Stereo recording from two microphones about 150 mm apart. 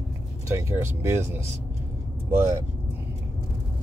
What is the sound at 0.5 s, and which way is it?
Speech, 20° right (ahead or behind).